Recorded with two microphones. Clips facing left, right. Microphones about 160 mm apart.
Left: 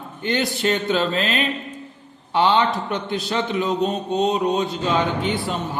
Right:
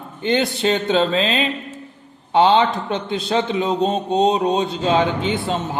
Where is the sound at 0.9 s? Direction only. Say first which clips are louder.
Right 3 dB; 30° right (ahead or behind).